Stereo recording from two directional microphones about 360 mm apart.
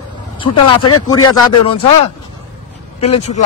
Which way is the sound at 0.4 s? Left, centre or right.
Centre.